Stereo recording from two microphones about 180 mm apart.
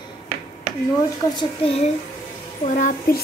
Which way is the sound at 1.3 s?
30° left (ahead or behind).